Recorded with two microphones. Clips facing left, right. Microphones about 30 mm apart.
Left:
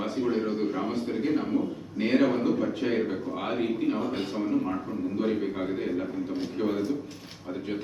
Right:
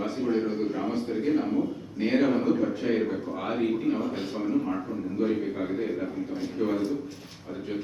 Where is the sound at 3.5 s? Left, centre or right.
Centre.